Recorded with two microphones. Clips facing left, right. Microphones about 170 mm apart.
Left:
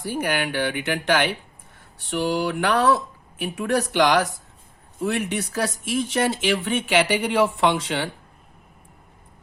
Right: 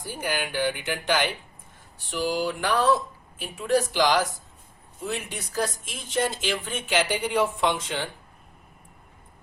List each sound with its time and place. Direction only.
0.0 s speech: 65° left (ahead or behind)